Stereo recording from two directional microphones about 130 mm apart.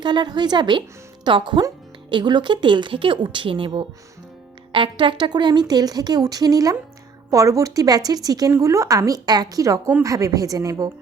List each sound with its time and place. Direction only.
0.0 s a woman's voice: 35° right (ahead or behind)